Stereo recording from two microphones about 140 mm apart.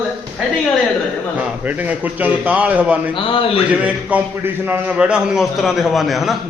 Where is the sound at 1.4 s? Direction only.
10° right (ahead or behind).